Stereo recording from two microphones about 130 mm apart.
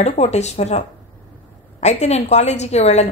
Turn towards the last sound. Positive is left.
turn(degrees=60)  # may be behind; listen again after turning